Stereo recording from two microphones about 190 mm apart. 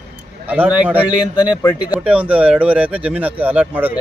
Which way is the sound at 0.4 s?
10° right (ahead or behind).